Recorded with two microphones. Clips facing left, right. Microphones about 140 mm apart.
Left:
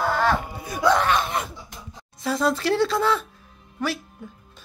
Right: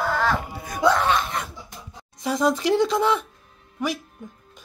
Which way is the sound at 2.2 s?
15° right (ahead or behind).